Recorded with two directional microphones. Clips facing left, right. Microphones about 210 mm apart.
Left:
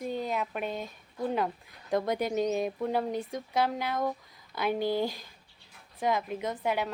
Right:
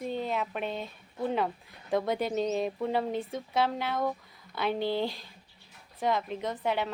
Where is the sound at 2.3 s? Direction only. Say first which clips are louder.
Left 1 dB; 10° left (ahead or behind).